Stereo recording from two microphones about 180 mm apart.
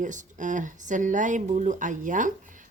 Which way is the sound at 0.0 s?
45° right (ahead or behind).